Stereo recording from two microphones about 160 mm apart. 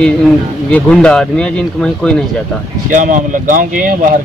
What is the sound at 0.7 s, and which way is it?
Speech, 5° left (ahead or behind).